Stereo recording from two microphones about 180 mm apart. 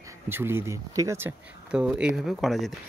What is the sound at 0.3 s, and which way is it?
Speech, 15° right (ahead or behind).